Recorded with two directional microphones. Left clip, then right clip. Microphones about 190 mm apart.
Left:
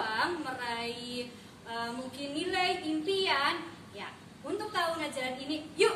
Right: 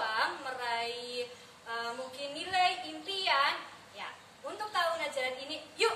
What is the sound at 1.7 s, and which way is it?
A woman's voice, centre (ahead or behind).